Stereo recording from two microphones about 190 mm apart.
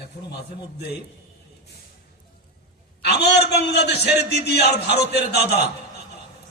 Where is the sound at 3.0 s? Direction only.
60° left (ahead or behind).